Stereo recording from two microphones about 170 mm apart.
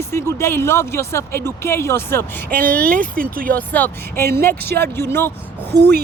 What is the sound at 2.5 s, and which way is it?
Speech, 55° right (ahead or behind).